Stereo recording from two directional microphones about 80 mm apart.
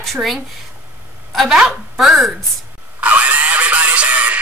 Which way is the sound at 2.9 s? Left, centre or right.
Centre.